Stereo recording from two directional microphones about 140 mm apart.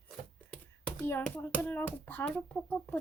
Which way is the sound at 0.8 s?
10° left (ahead or behind).